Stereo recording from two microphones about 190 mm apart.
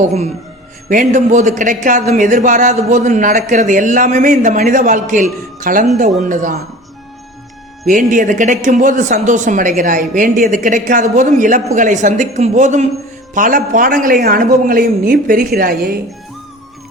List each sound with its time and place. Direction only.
0.0 s a woman's voice: 35° right (ahead or behind)
7.9 s a woman's voice: 45° right (ahead or behind)